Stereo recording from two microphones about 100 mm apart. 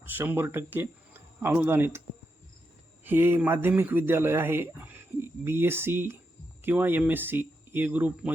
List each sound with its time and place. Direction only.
0.0 s speech: 20° right (ahead or behind)
3.0 s speech: 20° right (ahead or behind)